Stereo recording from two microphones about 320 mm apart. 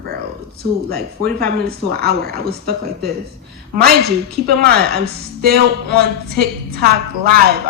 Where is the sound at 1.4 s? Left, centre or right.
Right.